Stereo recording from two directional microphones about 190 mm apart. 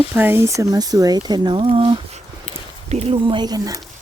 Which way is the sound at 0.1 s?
10° right (ahead or behind).